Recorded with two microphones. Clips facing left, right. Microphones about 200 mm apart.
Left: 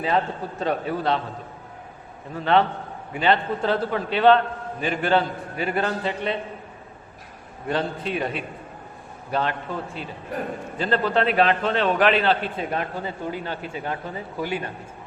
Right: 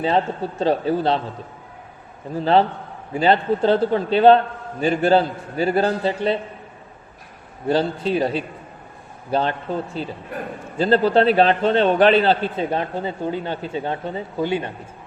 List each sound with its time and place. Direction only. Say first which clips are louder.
0.0 s a man's voice: right 4 dB; 30° right (ahead or behind)
2.4 s a man's voice: right 3 dB; 35° right (ahead or behind)
7.7 s a man's voice: right 6 dB; 30° right (ahead or behind)